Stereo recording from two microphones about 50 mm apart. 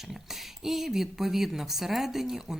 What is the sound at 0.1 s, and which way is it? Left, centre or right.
Speech, centre.